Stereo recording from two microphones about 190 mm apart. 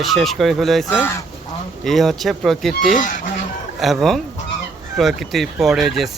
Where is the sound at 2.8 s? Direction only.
45° left (ahead or behind).